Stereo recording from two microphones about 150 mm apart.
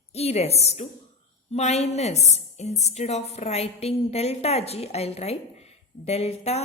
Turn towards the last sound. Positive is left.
turn(degrees=45)  # may be behind; listen again after turning